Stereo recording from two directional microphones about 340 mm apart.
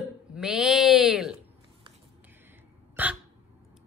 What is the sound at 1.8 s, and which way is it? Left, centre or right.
Hiccup, centre.